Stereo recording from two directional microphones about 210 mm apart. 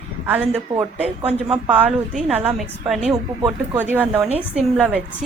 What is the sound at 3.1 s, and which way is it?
A woman's voice, 15° right (ahead or behind).